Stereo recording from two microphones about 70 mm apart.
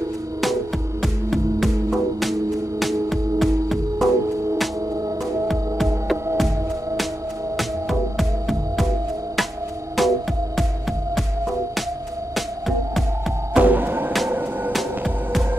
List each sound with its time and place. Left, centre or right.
1.0 s music: centre
7.5 s music: centre
9.9 s music: centre
12.4 s music: centre
13.6 s music: right